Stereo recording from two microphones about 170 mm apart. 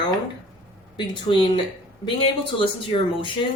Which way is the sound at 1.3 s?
30° left (ahead or behind).